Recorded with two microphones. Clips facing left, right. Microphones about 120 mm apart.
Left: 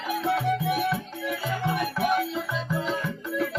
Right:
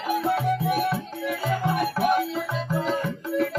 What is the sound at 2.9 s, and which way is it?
Music, 40° right (ahead or behind).